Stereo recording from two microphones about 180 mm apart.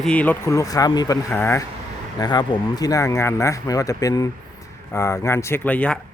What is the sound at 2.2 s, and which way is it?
Speech, 25° left (ahead or behind).